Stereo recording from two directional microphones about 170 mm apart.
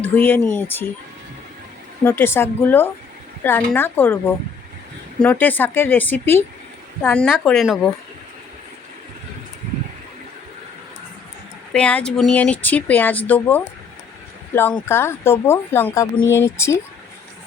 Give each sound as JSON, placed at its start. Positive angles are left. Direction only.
{"t": 0.0, "sound": "speech", "side_deg": 10}
{"t": 2.0, "sound": "speech", "side_deg": 15}
{"t": 11.7, "sound": "speech", "side_deg": 5}